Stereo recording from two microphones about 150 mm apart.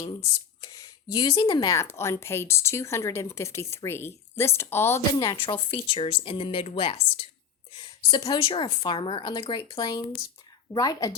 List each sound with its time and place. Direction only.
0.6 s speech: 25° left (ahead or behind)
5.5 s a woman's voice: 35° left (ahead or behind)